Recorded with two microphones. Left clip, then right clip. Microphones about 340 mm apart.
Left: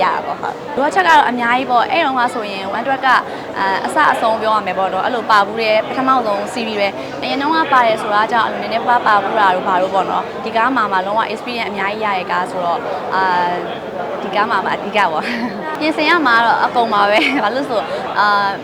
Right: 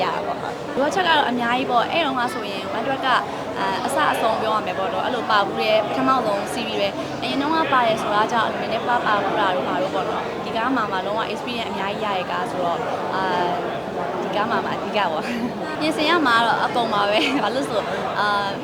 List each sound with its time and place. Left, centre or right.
0.8 s speech: centre
14.3 s speech: centre